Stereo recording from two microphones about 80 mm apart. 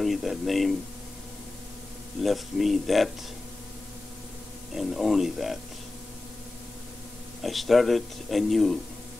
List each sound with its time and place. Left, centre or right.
0.0 s speech: centre
2.2 s speech: centre
4.7 s speech: centre
7.4 s speech: centre